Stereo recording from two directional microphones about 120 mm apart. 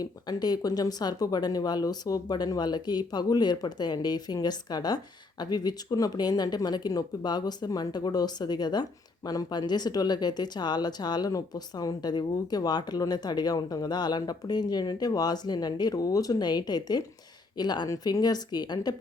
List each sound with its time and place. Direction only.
0.0 s speech: 35° left (ahead or behind)